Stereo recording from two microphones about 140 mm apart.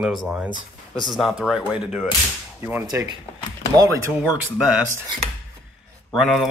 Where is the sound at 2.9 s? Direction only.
30° right (ahead or behind).